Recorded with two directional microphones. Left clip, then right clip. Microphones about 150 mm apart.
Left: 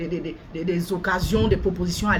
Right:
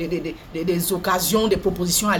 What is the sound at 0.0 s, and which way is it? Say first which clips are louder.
Speech: right 3 dB; 20° left (ahead or behind).